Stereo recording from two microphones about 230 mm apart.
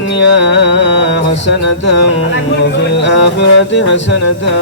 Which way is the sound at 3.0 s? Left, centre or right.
Left.